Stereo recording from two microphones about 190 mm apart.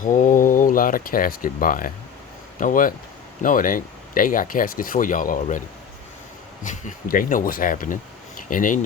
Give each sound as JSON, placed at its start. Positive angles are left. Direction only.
{"t": 0.0, "sound": "speech", "side_deg": 45}